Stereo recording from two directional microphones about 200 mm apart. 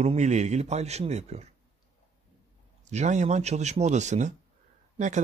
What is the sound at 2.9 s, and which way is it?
Speech, 35° right (ahead or behind).